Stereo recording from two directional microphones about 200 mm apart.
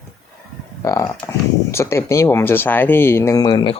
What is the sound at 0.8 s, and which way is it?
Speech, 15° left (ahead or behind).